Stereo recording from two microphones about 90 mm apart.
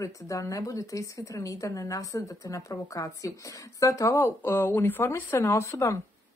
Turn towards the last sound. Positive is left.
turn(degrees=35)  # may be behind; listen again after turning